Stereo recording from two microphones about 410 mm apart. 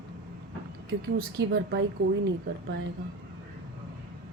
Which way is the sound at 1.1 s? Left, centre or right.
Right.